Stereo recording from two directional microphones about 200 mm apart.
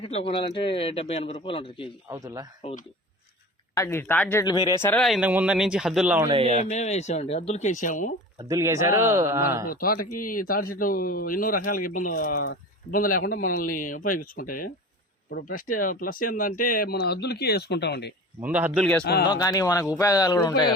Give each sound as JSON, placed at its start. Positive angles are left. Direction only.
{"t": 0.0, "sound": "a man's voice", "side_deg": 30}
{"t": 2.0, "sound": "a man's voice", "side_deg": -15}
{"t": 2.6, "sound": "speech", "side_deg": 35}
{"t": 3.8, "sound": "speech", "side_deg": 10}
{"t": 4.9, "sound": "speech", "side_deg": 0}
{"t": 6.2, "sound": "speech", "side_deg": -30}
{"t": 6.6, "sound": "speech", "side_deg": 35}
{"t": 8.4, "sound": "a man's voice", "side_deg": -15}
{"t": 9.6, "sound": "a man's voice", "side_deg": 45}
{"t": 18.4, "sound": "a man's voice", "side_deg": -10}
{"t": 18.8, "sound": "speech", "side_deg": 5}
{"t": 19.0, "sound": "a man's voice", "side_deg": 55}
{"t": 19.3, "sound": "a man's voice", "side_deg": 20}